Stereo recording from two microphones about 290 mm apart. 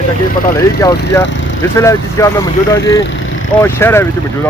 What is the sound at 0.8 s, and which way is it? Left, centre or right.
Speech, centre.